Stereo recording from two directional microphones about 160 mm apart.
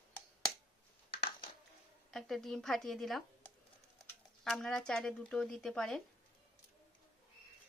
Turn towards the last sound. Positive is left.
turn(degrees=5)  # may be behind; listen again after turning